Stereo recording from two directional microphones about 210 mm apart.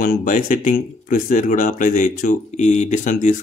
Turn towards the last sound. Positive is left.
turn(degrees=35)  # may be behind; listen again after turning